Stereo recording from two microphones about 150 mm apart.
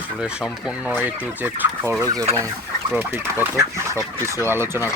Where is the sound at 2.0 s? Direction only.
25° right (ahead or behind).